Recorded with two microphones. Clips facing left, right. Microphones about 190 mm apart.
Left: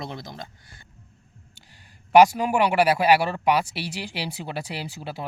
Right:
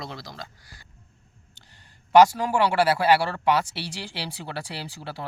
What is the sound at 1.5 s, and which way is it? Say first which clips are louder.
A man's voice: left 2 dB; 10° left (ahead or behind).